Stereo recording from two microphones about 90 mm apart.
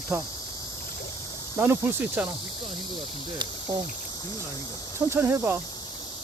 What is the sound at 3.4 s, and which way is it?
Speech, 55° right (ahead or behind).